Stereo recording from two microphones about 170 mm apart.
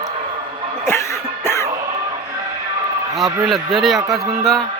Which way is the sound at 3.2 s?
Centre (ahead or behind).